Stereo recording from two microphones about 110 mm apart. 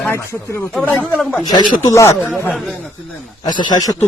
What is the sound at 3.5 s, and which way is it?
Speech, 40° left (ahead or behind).